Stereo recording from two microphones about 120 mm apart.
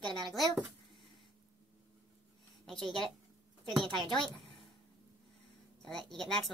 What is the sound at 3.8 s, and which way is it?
Speech, 40° right (ahead or behind).